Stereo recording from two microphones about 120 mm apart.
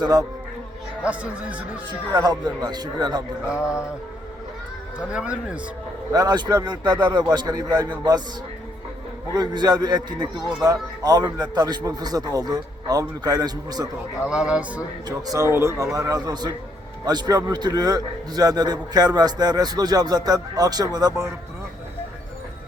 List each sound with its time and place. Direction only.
0.0 s a man's voice: 30° right (ahead or behind)
1.0 s speech: 10° right (ahead or behind)
1.9 s a man's voice: 35° right (ahead or behind)
3.6 s music: 25° left (ahead or behind)
4.9 s speech: 10° right (ahead or behind)
6.1 s a man's voice: 35° right (ahead or behind)
9.3 s a man's voice: 35° right (ahead or behind)
14.3 s speech: 5° right (ahead or behind)
15.0 s a man's voice: 30° right (ahead or behind)